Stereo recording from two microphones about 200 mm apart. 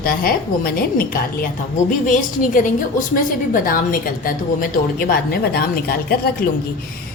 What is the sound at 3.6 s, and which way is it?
Speech, 45° left (ahead or behind).